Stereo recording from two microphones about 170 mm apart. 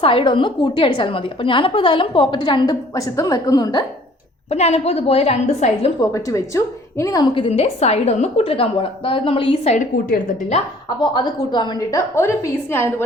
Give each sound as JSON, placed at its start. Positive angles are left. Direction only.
{"t": 0.0, "sound": "a woman's voice", "side_deg": 30}
{"t": 4.4, "sound": "a woman's voice", "side_deg": 40}
{"t": 6.0, "sound": "a woman's voice", "side_deg": 20}
{"t": 7.3, "sound": "a woman's voice", "side_deg": 35}
{"t": 9.7, "sound": "a woman's voice", "side_deg": 45}
{"t": 11.0, "sound": "a woman's voice", "side_deg": 25}